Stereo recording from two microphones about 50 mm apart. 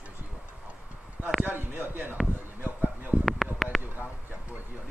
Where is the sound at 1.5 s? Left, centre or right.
Right.